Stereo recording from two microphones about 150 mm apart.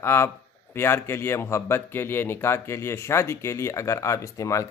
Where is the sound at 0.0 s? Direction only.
15° left (ahead or behind).